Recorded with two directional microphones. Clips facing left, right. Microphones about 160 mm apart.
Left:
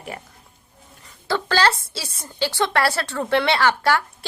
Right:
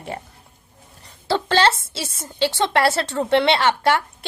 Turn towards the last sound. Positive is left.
turn(degrees=-25)  # may be behind; listen again after turning